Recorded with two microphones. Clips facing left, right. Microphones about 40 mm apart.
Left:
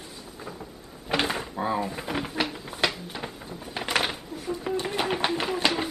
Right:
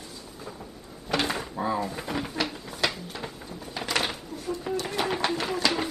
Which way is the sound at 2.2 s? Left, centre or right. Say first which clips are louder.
Left 1 dB; centre.